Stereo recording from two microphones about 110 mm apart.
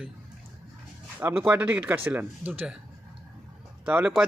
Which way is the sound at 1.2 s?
20° right (ahead or behind).